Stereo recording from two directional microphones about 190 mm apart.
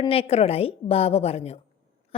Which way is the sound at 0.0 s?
30° left (ahead or behind).